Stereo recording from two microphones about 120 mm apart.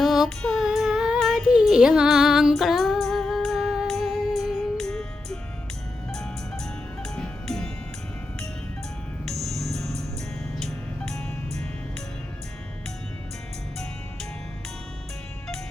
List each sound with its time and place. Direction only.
0.0 s music: centre (ahead or behind)
9.5 s music: 65° right (ahead or behind)
10.7 s music: centre (ahead or behind)